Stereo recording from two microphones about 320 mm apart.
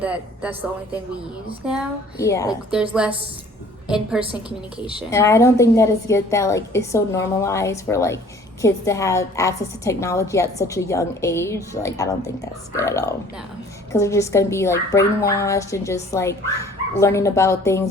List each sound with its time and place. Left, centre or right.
0.0 s a woman's voice: centre
1.6 s a woman's voice: centre
2.1 s speech: centre
3.8 s a woman's voice: centre
4.2 s a woman's voice: centre
5.1 s speech: centre